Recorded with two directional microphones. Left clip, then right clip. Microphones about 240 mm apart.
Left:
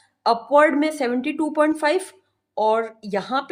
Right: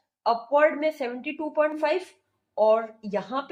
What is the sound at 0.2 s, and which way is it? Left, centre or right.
A woman's voice, left.